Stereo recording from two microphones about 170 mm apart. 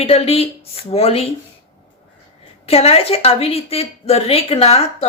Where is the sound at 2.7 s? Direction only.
35° left (ahead or behind).